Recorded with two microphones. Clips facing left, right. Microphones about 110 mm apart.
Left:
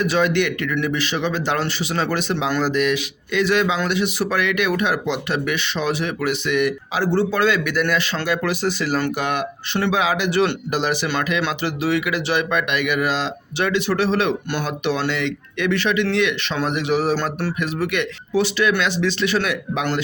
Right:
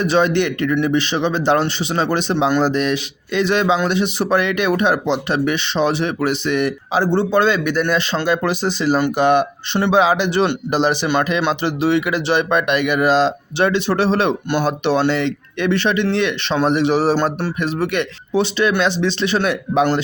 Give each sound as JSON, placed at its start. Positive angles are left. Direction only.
{"t": 0.0, "sound": "a man's voice", "side_deg": -30}